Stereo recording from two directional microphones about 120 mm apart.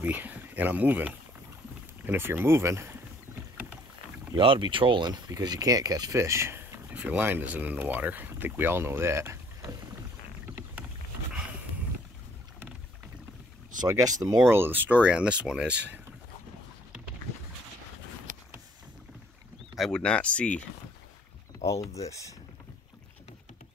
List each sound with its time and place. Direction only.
0.0 s speech: 15° right (ahead or behind)
3.5 s rowboat: 15° right (ahead or behind)
4.4 s speech: 45° right (ahead or behind); by 9.8 s 25° right (ahead or behind)
10.5 s rowboat: 15° right (ahead or behind)
13.7 s speech: 30° right (ahead or behind)
14.5 s speech: 20° right (ahead or behind)
19.7 s speech: 5° left (ahead or behind)